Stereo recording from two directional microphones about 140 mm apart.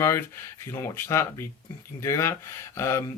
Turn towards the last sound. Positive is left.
turn(degrees=20)  # may be behind; listen again after turning